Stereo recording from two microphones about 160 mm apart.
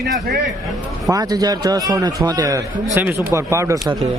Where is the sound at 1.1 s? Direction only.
25° right (ahead or behind).